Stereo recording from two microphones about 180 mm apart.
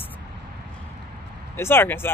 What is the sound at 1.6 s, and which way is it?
Speech, 15° left (ahead or behind).